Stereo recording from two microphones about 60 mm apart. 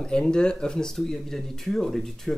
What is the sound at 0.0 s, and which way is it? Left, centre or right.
Speech, centre.